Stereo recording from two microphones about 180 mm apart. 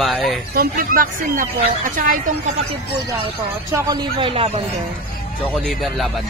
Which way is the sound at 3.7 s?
15° right (ahead or behind).